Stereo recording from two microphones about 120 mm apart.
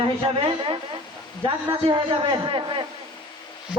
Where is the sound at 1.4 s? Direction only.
45° right (ahead or behind).